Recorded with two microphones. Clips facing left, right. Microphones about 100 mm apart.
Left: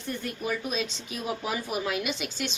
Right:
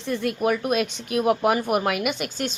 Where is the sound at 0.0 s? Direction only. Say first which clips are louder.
Right 9 dB; 90° right.